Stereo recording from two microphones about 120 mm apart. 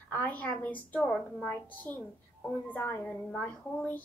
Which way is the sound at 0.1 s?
15° left (ahead or behind).